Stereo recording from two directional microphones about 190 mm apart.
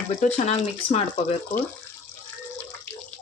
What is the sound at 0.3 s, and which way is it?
Speech, 35° left (ahead or behind).